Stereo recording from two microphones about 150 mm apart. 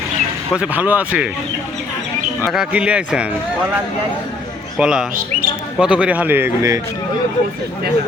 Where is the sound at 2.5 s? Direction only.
5° right (ahead or behind).